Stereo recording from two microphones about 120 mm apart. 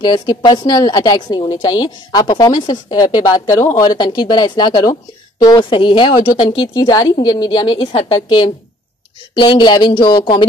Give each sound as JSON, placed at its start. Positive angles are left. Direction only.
{"t": 0.0, "sound": "speech", "side_deg": 40}
{"t": 3.5, "sound": "speech", "side_deg": 25}